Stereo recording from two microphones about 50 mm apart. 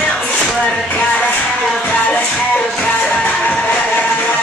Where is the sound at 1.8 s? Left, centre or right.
Left.